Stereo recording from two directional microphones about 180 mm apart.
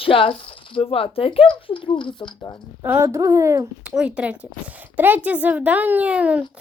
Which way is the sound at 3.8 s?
5° right (ahead or behind).